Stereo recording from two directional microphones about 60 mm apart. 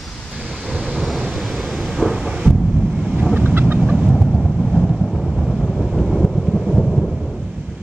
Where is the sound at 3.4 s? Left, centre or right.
Right.